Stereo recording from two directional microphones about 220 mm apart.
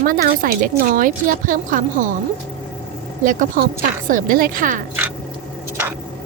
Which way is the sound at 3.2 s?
40° right (ahead or behind).